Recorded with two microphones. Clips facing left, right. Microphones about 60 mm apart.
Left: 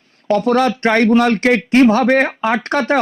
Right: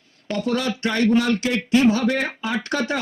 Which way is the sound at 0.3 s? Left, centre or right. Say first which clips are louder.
Left 9 dB; left.